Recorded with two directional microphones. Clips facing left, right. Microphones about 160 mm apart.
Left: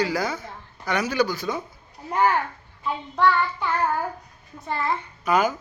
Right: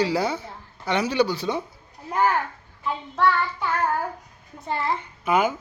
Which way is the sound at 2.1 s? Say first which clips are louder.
Left 1 dB; 5° right (ahead or behind).